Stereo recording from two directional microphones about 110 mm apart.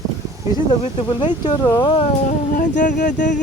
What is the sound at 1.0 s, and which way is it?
Speech, 40° left (ahead or behind).